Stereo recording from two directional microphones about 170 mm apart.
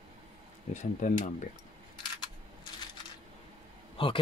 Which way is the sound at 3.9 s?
30° left (ahead or behind).